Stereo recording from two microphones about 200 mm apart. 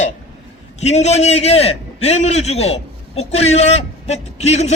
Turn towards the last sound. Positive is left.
turn(degrees=35)  # may be behind; listen again after turning